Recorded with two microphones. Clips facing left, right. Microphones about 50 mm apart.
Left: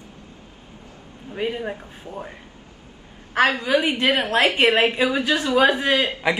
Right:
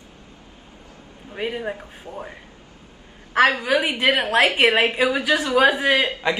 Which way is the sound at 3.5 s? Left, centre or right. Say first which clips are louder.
Left 1 dB; right.